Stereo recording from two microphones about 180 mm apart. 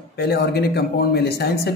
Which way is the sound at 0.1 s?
65° left (ahead or behind).